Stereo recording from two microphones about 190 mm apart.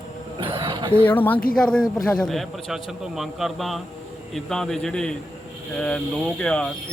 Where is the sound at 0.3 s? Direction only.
25° right (ahead or behind).